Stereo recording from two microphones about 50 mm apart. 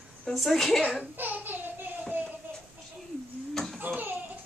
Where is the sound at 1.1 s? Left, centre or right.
Right.